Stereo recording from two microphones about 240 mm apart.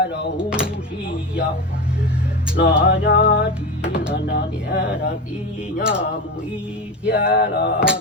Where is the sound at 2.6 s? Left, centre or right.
Left.